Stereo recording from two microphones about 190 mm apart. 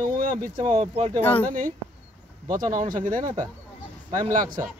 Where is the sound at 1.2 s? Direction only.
10° left (ahead or behind).